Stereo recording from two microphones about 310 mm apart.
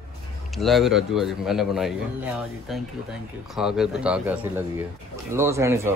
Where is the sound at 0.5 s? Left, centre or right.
Centre.